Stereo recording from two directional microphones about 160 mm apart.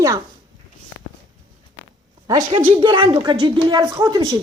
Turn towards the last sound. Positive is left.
turn(degrees=-25)  # may be behind; listen again after turning